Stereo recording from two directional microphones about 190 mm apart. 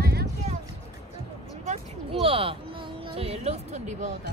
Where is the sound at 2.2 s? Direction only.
30° right (ahead or behind).